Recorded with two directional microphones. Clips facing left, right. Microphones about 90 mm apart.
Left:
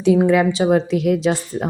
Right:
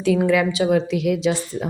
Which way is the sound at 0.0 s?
25° left (ahead or behind).